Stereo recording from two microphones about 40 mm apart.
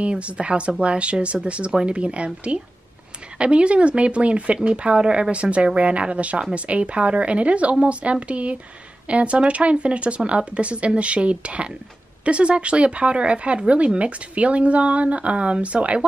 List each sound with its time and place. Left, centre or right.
0.0 s speech: right